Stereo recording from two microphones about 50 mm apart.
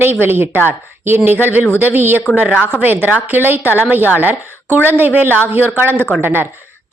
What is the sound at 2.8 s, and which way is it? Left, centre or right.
A woman's voice, right.